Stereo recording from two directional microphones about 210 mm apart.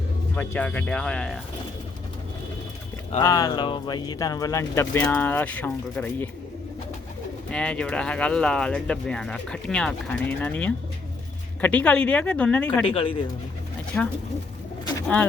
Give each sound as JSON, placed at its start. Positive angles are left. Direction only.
{"t": 0.3, "sound": "speech", "side_deg": 5}
{"t": 3.2, "sound": "speech", "side_deg": 15}
{"t": 7.5, "sound": "speech", "side_deg": 5}
{"t": 12.9, "sound": "speech", "side_deg": 25}
{"t": 13.9, "sound": "speech", "side_deg": 5}